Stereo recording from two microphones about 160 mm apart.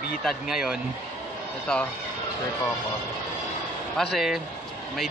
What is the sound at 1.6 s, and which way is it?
Music, 5° left (ahead or behind).